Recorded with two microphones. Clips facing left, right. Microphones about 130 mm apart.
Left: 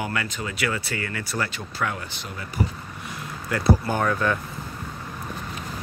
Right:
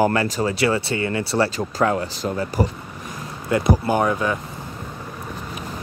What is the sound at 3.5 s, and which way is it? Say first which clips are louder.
Speech: right 4 dB; 20° right (ahead or behind).